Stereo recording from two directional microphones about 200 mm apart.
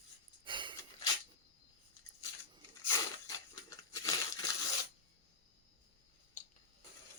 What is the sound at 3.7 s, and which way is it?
Crumpling, 15° left (ahead or behind).